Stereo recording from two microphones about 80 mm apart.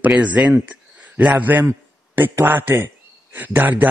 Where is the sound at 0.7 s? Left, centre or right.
Centre.